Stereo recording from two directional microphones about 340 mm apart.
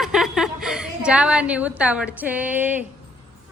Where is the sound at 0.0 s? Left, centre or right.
Centre.